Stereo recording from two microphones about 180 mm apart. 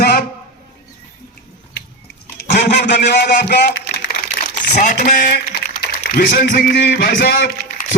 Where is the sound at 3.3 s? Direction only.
65° left (ahead or behind).